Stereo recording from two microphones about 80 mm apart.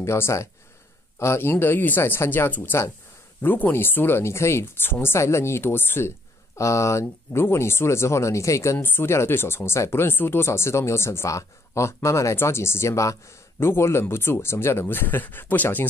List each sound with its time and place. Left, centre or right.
0.0 s speech: left
8.7 s speech: left